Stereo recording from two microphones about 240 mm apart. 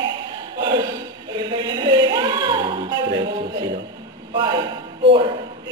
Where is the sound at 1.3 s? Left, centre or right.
Centre.